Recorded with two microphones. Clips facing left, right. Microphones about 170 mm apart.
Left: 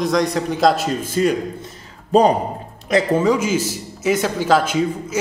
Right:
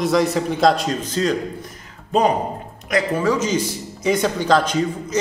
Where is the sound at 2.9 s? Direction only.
30° left (ahead or behind).